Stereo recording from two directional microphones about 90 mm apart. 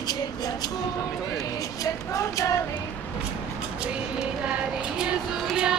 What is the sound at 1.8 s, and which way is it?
Speech, 35° left (ahead or behind).